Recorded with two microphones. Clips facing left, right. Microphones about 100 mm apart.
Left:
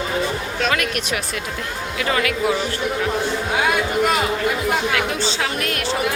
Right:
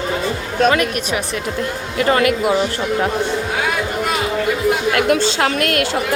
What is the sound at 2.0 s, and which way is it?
Speech, 40° right (ahead or behind).